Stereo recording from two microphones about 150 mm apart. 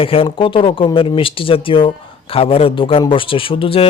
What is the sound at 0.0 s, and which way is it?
Speech, 40° left (ahead or behind).